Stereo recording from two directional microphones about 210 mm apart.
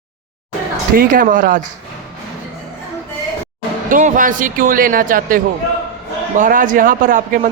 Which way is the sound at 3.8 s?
40° right (ahead or behind).